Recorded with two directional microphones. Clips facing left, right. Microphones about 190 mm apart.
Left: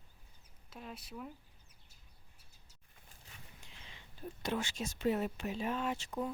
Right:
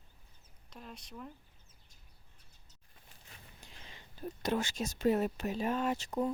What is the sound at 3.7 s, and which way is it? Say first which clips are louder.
Speech: right 3 dB; 40° right (ahead or behind).